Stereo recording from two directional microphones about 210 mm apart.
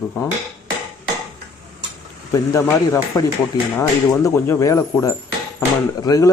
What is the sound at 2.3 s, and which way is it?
Speech, 15° left (ahead or behind).